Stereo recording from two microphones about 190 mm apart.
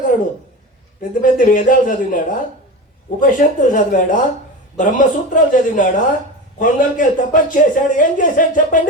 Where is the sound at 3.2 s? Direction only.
45° left (ahead or behind).